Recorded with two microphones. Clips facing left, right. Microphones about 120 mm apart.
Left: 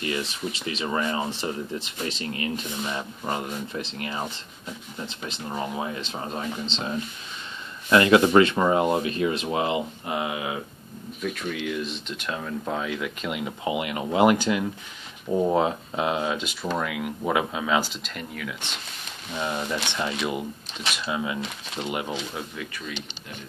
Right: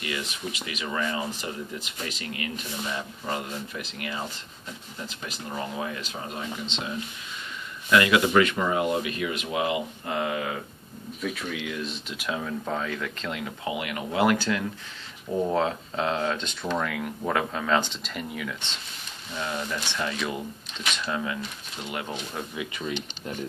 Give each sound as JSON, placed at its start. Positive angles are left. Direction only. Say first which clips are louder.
{"t": 0.0, "sound": "speech", "louder": "left 4 dB", "side_deg": 30}
{"t": 7.9, "sound": "speech", "louder": "left 4 dB", "side_deg": 35}
{"t": 10.0, "sound": "speech", "louder": "even", "side_deg": 15}
{"t": 11.2, "sound": "speech", "louder": "left 3 dB", "side_deg": 0}
{"t": 19.3, "sound": "speech", "louder": "left 3 dB", "side_deg": 20}
{"t": 22.6, "sound": "speech", "louder": "right 3 dB", "side_deg": -20}